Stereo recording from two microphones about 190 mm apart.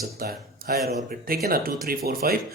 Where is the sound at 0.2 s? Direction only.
50° right (ahead or behind).